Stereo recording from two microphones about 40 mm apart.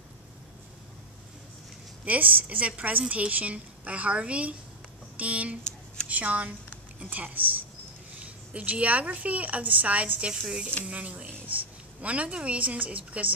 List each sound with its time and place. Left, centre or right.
2.0 s a woman's voice: right
5.6 s a sound: left
6.0 s a woman's voice: right
8.5 s a woman's voice: right
11.2 s a sound: right
12.0 s a woman's voice: right